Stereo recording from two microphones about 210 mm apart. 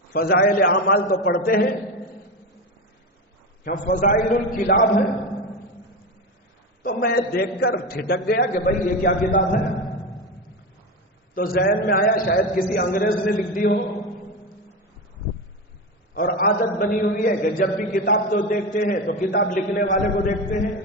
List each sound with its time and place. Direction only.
0.1 s a man's voice: 45° left (ahead or behind)
3.6 s a man's voice: 40° left (ahead or behind)
6.8 s a man's voice: 45° left (ahead or behind)
9.8 s music: centre (ahead or behind)
11.3 s a man's voice: 45° left (ahead or behind)
16.1 s a man's voice: 45° left (ahead or behind)